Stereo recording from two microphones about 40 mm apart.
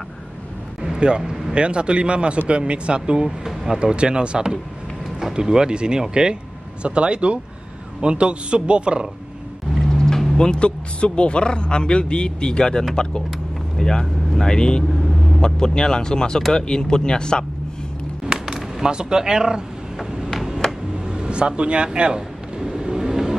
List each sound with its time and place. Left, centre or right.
0.8 s a sound: right
1.5 s a man's voice: right
3.3 s speech: centre
3.8 s a man's voice: right
9.8 s vehicle: centre
10.3 s speech: left
18.5 s speech: centre
20.0 s a sound: centre
21.1 s speech: right
22.6 s vehicle: centre